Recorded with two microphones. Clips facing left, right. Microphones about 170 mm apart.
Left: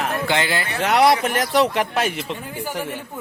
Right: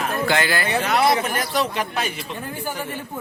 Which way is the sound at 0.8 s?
70° left (ahead or behind).